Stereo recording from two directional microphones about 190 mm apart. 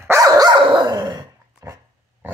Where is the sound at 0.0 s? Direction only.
15° right (ahead or behind).